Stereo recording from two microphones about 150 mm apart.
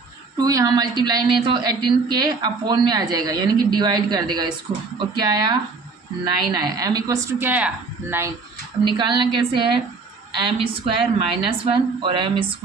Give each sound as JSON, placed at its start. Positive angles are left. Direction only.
{"t": 0.3, "sound": "a woman's voice", "side_deg": -25}
{"t": 8.8, "sound": "a woman's voice", "side_deg": -30}